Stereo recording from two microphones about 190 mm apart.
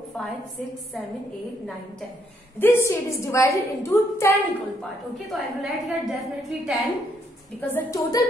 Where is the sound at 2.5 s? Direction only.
15° left (ahead or behind).